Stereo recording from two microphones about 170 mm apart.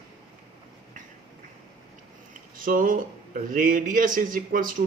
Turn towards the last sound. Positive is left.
turn(degrees=-55)  # may be behind; listen again after turning